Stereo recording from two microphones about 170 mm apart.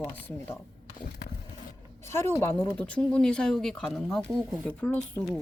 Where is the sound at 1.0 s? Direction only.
60° left (ahead or behind).